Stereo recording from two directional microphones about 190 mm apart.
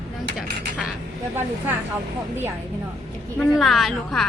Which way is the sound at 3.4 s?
Centre (ahead or behind).